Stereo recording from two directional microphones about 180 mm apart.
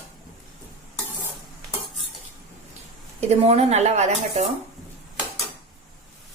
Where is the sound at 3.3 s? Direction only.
35° right (ahead or behind).